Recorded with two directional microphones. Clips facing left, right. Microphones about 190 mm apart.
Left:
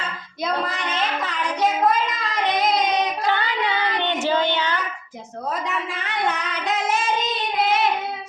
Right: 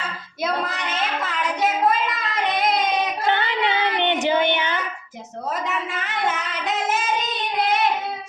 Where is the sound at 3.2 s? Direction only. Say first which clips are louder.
Right 1 dB; 20° right (ahead or behind).